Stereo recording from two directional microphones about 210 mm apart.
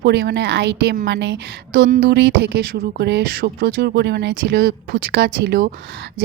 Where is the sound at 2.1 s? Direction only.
55° right (ahead or behind).